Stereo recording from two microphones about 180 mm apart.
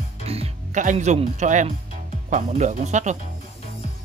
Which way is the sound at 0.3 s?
40° right (ahead or behind).